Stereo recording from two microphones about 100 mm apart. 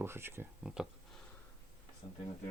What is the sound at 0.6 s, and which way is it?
Speech, 5° right (ahead or behind).